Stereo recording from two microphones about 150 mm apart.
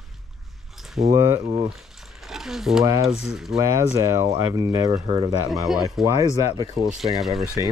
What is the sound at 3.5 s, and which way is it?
Speech, 20° right (ahead or behind).